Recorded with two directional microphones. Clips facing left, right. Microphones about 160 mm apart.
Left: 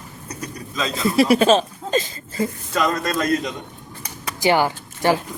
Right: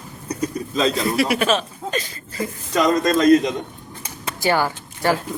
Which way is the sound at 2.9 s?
20° right (ahead or behind).